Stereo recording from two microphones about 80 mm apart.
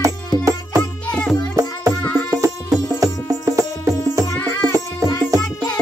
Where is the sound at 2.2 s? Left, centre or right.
Right.